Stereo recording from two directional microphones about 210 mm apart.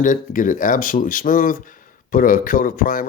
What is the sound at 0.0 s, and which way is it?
Speech, 40° left (ahead or behind).